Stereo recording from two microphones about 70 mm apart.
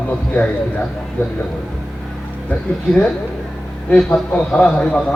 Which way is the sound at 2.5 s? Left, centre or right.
Centre.